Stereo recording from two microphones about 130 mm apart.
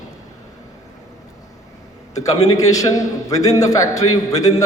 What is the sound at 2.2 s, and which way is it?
A man's voice, 25° left (ahead or behind).